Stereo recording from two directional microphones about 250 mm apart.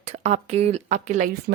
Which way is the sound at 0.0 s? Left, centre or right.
Right.